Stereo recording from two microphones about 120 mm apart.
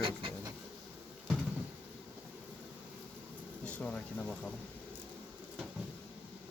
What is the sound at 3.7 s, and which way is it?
Speech, 10° left (ahead or behind).